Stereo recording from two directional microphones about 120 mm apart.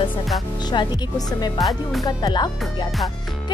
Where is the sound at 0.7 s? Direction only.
35° left (ahead or behind).